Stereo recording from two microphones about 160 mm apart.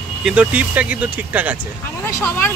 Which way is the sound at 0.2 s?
5° right (ahead or behind).